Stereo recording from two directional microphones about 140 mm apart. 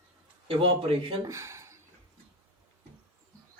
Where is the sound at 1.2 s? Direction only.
20° right (ahead or behind).